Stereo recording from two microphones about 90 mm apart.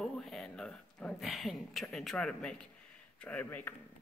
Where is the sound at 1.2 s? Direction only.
Centre (ahead or behind); by 3.7 s 20° left (ahead or behind).